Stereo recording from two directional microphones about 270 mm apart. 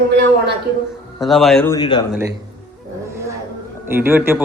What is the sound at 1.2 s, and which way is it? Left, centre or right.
Speech, centre.